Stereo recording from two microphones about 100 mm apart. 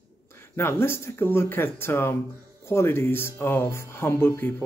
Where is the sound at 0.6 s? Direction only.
25° left (ahead or behind).